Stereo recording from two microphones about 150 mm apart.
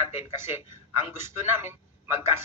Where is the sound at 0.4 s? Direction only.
15° right (ahead or behind).